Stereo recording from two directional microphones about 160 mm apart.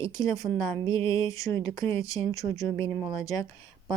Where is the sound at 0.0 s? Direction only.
20° left (ahead or behind).